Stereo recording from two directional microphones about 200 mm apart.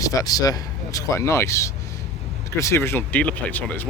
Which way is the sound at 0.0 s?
15° left (ahead or behind).